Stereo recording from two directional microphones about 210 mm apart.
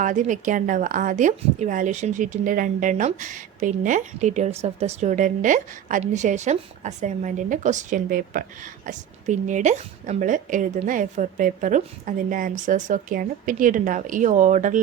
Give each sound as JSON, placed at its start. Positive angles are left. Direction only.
{"t": 0.0, "sound": "a woman's voice", "side_deg": -35}